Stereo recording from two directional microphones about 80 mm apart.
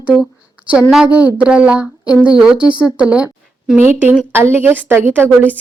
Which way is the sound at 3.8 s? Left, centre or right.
Right.